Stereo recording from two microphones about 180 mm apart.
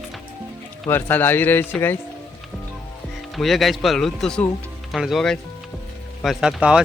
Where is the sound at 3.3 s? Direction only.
Centre (ahead or behind).